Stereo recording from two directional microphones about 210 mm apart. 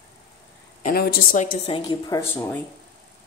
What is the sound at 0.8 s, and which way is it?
Speech, 40° left (ahead or behind).